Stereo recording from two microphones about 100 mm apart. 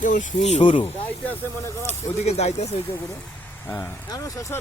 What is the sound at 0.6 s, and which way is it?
Speech, 55° left (ahead or behind).